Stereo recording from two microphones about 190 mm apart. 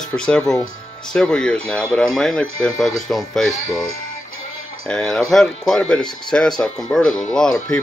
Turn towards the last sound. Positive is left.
turn(degrees=10)  # may be behind; listen again after turning